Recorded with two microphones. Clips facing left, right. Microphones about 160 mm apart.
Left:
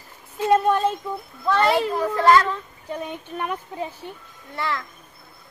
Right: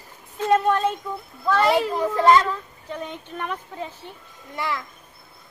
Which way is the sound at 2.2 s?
20° right (ahead or behind).